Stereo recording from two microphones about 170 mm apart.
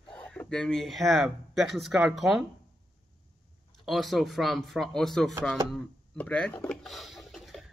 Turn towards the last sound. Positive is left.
turn(degrees=0)  # may be behind; listen again after turning